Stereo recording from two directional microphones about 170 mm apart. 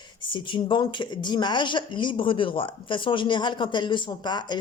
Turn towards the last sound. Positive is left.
turn(degrees=25)  # may be behind; listen again after turning